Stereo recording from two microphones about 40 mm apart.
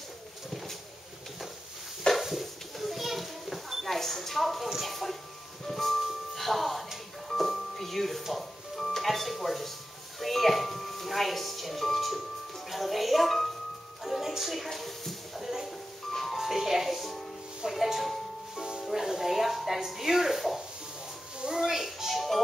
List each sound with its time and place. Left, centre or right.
2.1 s children playing: centre
4.6 s a sound: centre
5.7 s music: centre
14.3 s a sound: centre
16.1 s music: centre
16.3 s music: centre
18.6 s music: centre